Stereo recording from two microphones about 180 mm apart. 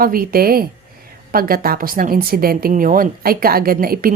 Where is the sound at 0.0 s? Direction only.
55° right (ahead or behind).